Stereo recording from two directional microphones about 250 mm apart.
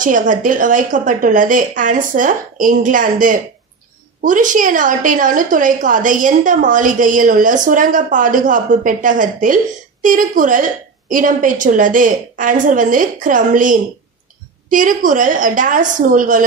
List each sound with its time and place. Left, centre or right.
0.0 s a woman's voice: right